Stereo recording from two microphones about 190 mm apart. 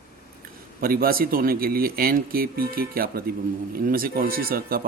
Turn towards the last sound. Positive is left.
turn(degrees=-50)  # may be behind; listen again after turning